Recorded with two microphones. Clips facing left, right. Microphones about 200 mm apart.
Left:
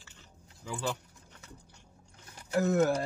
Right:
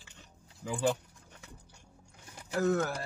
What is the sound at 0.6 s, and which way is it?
Speech, 15° right (ahead or behind).